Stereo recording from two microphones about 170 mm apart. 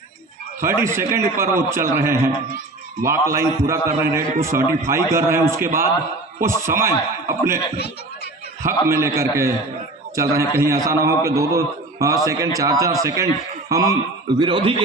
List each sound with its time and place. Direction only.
0.6 s a man's voice: 15° right (ahead or behind)
8.6 s a man's voice: 15° right (ahead or behind); by 14.8 s 30° right (ahead or behind)